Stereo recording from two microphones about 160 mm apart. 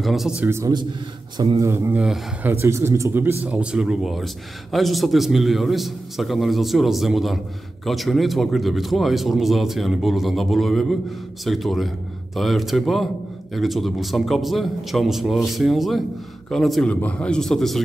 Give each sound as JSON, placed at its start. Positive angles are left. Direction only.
{"t": 0.0, "sound": "a man's voice", "side_deg": 0}
{"t": 2.0, "sound": "a man's voice", "side_deg": -5}
{"t": 2.5, "sound": "a man's voice", "side_deg": -15}